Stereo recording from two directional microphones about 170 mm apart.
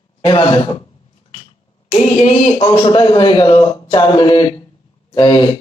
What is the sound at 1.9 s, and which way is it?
Speech, 35° left (ahead or behind).